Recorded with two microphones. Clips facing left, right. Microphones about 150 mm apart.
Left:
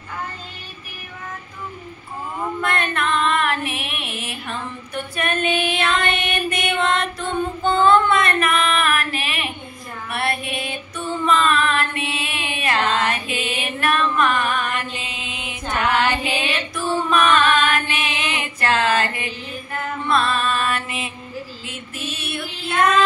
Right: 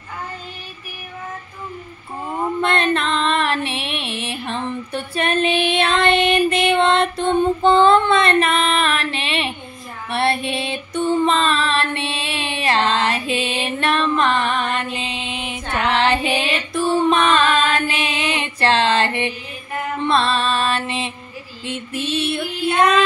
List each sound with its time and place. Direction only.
2.6 s music: 25° right (ahead or behind)
10.0 s female singing: 25° right (ahead or behind)
11.2 s music: 30° right (ahead or behind)
21.6 s female singing: 30° right (ahead or behind)